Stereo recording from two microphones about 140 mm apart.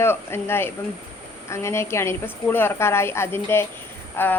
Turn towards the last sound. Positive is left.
turn(degrees=15)  # may be behind; listen again after turning